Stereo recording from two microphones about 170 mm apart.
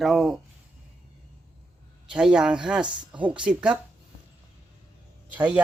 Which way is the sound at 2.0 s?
5° right (ahead or behind).